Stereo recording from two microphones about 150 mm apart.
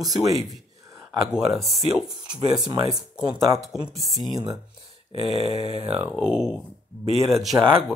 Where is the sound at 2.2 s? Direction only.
30° right (ahead or behind).